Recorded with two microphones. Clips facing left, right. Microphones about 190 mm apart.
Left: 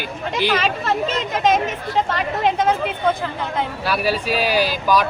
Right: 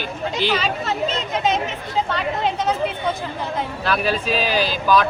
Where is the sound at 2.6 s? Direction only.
55° left (ahead or behind).